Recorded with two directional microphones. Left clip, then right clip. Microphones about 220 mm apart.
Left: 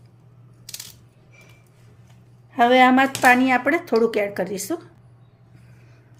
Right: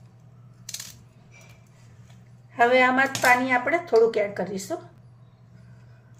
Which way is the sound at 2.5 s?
40° left (ahead or behind).